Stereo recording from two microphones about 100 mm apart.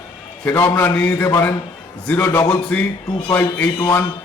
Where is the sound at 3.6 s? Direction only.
20° left (ahead or behind).